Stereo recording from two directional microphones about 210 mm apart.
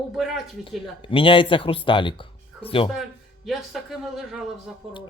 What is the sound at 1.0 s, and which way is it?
Speech, 25° left (ahead or behind).